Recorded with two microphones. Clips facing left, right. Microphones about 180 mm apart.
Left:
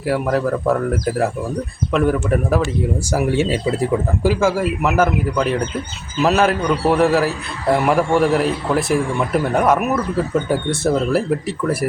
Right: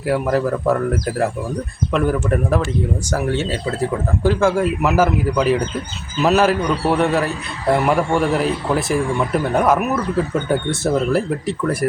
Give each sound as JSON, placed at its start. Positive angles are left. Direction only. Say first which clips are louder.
{"t": 0.0, "sound": "speech", "louder": "even", "side_deg": 0}